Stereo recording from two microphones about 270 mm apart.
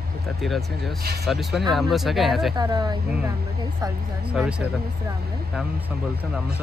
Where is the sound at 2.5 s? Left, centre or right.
Centre.